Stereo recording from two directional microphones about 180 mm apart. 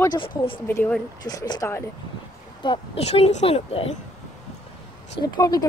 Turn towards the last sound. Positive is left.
turn(degrees=20)  # may be behind; listen again after turning